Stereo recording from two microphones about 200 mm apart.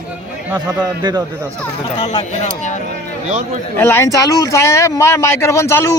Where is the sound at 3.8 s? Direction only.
10° left (ahead or behind).